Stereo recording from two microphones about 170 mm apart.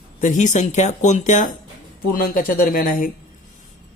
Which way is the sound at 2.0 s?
55° left (ahead or behind).